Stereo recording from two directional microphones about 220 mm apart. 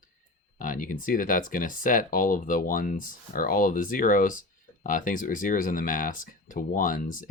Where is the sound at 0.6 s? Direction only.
35° left (ahead or behind).